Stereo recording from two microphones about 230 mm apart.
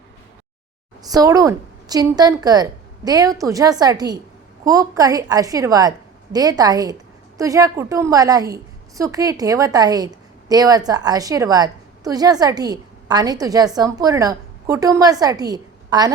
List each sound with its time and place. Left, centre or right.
1.1 s a woman's voice: centre